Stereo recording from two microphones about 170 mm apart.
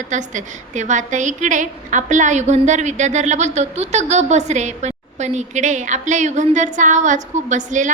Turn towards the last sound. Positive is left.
turn(degrees=-45)  # may be behind; listen again after turning